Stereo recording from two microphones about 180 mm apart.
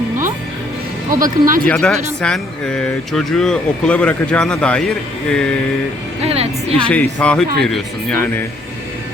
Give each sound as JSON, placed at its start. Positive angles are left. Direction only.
{"t": 1.2, "sound": "speech", "side_deg": -50}
{"t": 1.7, "sound": "speech", "side_deg": 5}
{"t": 6.2, "sound": "speech", "side_deg": -35}
{"t": 6.8, "sound": "speech", "side_deg": 5}